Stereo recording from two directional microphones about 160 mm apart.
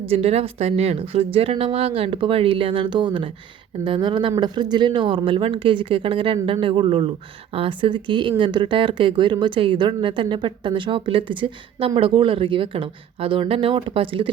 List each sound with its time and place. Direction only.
0.1 s speech: 40° right (ahead or behind)